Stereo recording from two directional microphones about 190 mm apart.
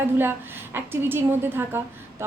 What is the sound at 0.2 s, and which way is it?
A woman's voice, 10° right (ahead or behind).